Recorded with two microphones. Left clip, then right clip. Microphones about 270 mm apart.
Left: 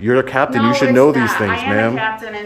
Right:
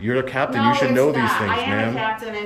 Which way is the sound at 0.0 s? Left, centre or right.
Centre.